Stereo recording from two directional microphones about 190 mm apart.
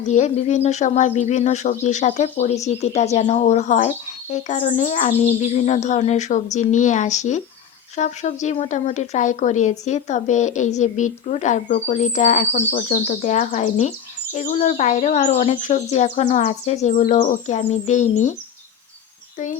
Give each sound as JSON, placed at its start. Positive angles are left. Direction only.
{"t": 0.0, "sound": "speech", "side_deg": 40}